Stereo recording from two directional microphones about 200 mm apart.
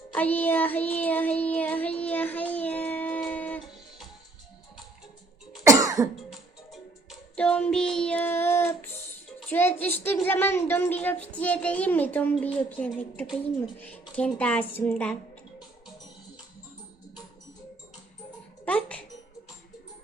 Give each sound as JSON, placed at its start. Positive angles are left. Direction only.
{"t": 0.1, "sound": "child singing", "side_deg": 10}
{"t": 5.6, "sound": "cough", "side_deg": -15}
{"t": 6.7, "sound": "child singing", "side_deg": 0}
{"t": 9.5, "sound": "a woman's voice", "side_deg": 10}
{"t": 18.6, "sound": "music", "side_deg": 5}